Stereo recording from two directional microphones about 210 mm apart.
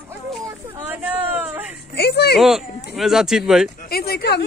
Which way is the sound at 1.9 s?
50° left (ahead or behind).